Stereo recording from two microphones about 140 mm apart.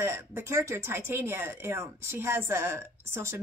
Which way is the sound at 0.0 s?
20° right (ahead or behind).